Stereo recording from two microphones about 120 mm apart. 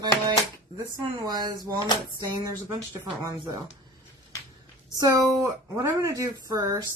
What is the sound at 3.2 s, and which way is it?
Speech, 35° right (ahead or behind).